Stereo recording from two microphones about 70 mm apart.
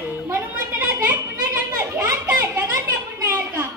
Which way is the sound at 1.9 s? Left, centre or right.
Right.